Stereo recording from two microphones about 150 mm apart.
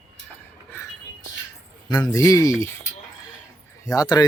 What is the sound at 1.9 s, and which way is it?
Speech, 25° left (ahead or behind).